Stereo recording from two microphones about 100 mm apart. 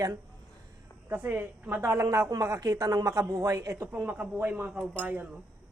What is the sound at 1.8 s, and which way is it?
A man's voice, 30° right (ahead or behind).